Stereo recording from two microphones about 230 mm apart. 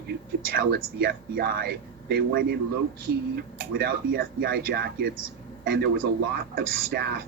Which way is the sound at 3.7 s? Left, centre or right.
Right.